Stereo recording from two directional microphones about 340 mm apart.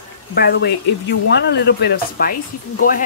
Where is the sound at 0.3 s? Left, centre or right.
Left.